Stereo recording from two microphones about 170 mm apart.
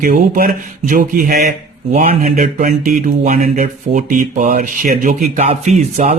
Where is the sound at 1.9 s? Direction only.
40° right (ahead or behind).